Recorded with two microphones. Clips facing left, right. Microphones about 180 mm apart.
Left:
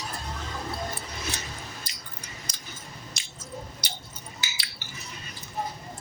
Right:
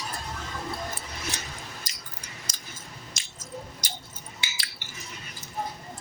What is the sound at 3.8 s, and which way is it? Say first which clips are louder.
Squish: even; 45° right (ahead or behind).